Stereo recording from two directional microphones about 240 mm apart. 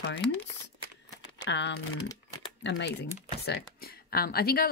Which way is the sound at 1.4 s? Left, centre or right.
Left.